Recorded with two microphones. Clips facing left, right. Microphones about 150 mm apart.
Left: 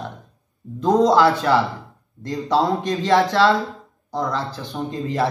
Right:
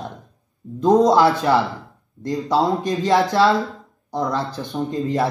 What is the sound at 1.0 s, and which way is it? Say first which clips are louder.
Speech: even; 15° right (ahead or behind).